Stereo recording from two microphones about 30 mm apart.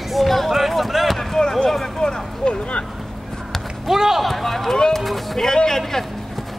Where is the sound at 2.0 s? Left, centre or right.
Left.